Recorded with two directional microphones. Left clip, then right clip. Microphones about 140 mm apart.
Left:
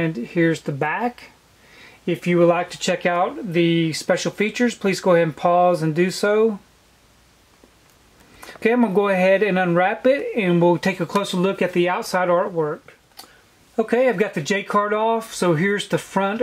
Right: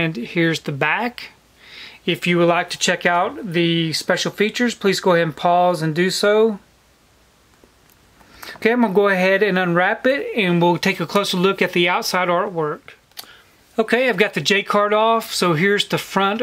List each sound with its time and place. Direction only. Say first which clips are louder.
0.0 s speech: right 1 dB; 30° right (ahead or behind)
8.5 s speech: right 1 dB; 35° right (ahead or behind)